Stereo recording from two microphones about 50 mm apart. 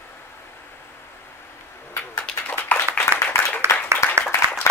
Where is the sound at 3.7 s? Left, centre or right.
Left.